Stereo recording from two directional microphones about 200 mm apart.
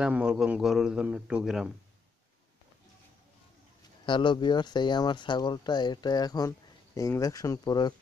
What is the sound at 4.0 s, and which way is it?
Speech, 25° left (ahead or behind).